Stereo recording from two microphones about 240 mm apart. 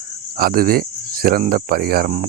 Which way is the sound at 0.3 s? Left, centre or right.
Right.